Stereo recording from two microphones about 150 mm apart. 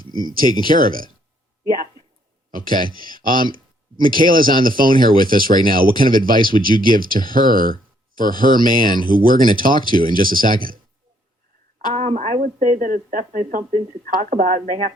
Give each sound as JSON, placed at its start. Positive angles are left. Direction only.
{"t": 0.7, "sound": "speech", "side_deg": -70}
{"t": 2.5, "sound": "a man's voice", "side_deg": -70}
{"t": 11.9, "sound": "speech", "side_deg": -45}